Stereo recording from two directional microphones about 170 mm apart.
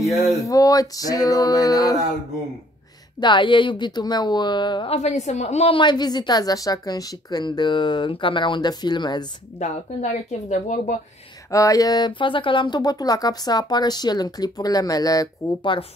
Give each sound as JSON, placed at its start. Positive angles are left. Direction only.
{"t": 0.0, "sound": "speech", "side_deg": 0}
{"t": 0.4, "sound": "a woman's voice", "side_deg": 20}
{"t": 3.2, "sound": "a woman's voice", "side_deg": 25}
{"t": 9.6, "sound": "speech", "side_deg": 40}
{"t": 11.5, "sound": "a woman's voice", "side_deg": 20}